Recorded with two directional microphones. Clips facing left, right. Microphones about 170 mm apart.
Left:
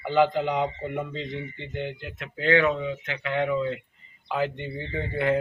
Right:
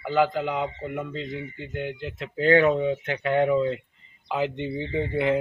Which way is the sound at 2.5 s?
45° right (ahead or behind).